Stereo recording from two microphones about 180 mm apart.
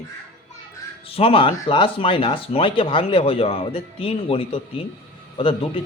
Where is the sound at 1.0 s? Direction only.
30° left (ahead or behind).